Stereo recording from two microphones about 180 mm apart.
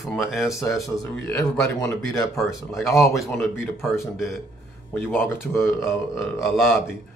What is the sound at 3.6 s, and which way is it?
Speech, 15° left (ahead or behind).